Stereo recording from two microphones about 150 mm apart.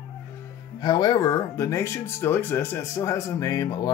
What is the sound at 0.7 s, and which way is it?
Speech, 30° left (ahead or behind).